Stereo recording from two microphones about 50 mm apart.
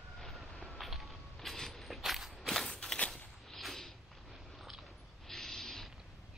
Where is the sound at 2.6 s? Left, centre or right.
Centre.